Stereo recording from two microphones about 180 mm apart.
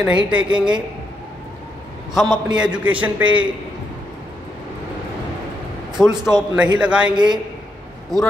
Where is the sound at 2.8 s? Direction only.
10° right (ahead or behind).